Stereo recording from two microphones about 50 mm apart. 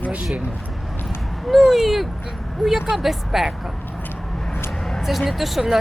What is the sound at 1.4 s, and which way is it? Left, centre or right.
Speech, centre.